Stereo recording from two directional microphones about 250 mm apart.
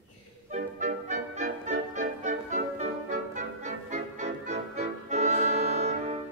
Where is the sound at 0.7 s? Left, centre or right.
Right.